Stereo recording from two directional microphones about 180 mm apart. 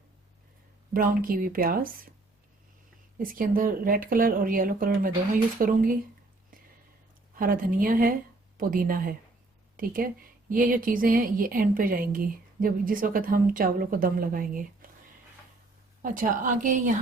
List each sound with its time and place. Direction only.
0.9 s a woman's voice: 55° right (ahead or behind)
3.2 s a woman's voice: 50° right (ahead or behind)
7.3 s a woman's voice: 50° right (ahead or behind)
16.0 s a woman's voice: 50° right (ahead or behind)